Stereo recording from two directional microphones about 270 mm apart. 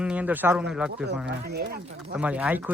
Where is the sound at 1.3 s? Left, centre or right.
Right.